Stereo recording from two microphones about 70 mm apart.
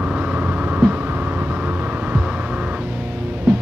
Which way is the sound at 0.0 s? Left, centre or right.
Centre.